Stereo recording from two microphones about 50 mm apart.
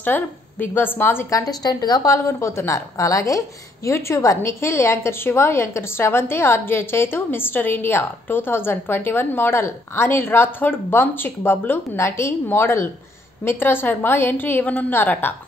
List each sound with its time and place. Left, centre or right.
0.0 s a woman's voice: left
2.0 s a woman's voice: left
4.4 s a woman's voice: left
5.2 s a woman's voice: left
12.0 s a woman's voice: left